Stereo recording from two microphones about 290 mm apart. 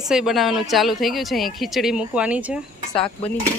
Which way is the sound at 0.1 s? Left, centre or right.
Centre.